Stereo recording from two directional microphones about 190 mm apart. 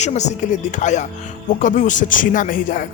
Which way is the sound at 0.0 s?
35° left (ahead or behind).